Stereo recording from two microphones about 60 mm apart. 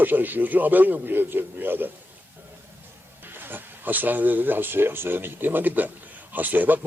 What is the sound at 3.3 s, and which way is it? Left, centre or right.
A man's voice, right.